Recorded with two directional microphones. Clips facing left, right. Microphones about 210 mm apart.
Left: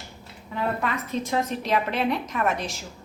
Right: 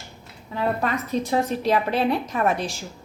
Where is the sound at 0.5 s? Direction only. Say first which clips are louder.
Right 3 dB; 35° right (ahead or behind).